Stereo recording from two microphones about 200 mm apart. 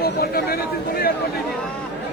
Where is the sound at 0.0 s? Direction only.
50° left (ahead or behind).